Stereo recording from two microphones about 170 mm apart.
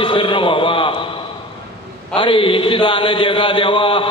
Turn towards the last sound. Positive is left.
turn(degrees=30)  # may be behind; listen again after turning